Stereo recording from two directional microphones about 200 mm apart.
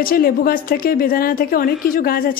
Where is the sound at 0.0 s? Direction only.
45° left (ahead or behind).